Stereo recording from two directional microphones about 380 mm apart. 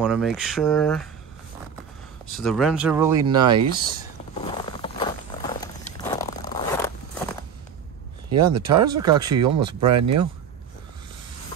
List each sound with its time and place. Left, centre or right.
0.0 s speech: centre
2.3 s speech: centre
4.4 s walk: centre
8.3 s speech: right
9.0 s speech: centre
9.8 s speech: right